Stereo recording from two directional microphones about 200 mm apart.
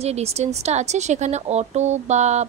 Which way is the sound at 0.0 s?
30° right (ahead or behind).